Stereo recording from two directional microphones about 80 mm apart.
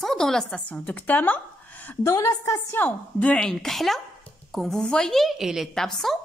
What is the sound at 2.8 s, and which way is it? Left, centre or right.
A woman's voice, centre.